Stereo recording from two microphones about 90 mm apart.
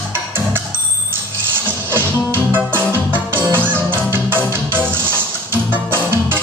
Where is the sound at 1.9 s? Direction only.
25° right (ahead or behind).